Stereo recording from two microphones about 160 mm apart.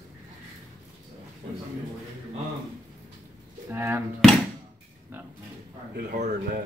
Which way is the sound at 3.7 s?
15° right (ahead or behind).